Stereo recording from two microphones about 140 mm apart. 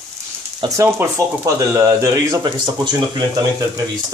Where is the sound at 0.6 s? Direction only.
25° right (ahead or behind).